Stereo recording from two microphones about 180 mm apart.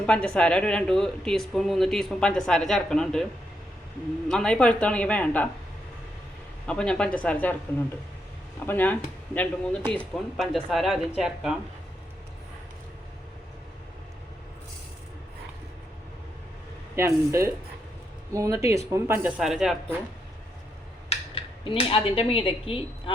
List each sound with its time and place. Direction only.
0.0 s speech: 5° left (ahead or behind)
4.3 s speech: 5° left (ahead or behind)
6.7 s speech: 5° left (ahead or behind)
8.6 s speech: 10° left (ahead or behind)
16.9 s speech: 15° right (ahead or behind)
21.1 s speech: 30° left (ahead or behind)